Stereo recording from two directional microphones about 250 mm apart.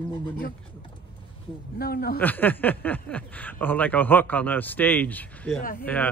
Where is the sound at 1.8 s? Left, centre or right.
Left.